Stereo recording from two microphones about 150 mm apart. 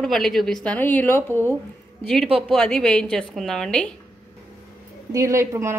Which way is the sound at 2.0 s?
5° left (ahead or behind).